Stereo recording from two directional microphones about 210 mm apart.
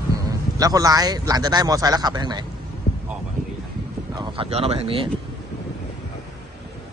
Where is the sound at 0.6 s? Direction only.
15° right (ahead or behind).